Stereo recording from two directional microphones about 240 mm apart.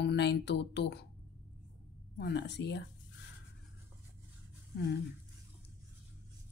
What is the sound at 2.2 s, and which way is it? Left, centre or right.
Speech, left.